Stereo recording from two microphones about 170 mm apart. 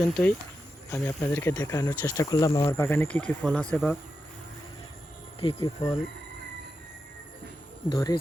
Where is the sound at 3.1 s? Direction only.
5° left (ahead or behind).